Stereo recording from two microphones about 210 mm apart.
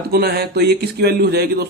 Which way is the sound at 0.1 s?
50° right (ahead or behind).